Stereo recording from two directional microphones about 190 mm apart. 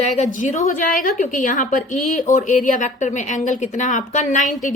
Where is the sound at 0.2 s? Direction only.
40° left (ahead or behind).